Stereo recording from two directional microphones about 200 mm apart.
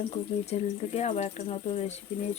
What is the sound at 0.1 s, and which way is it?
Speech, 30° left (ahead or behind).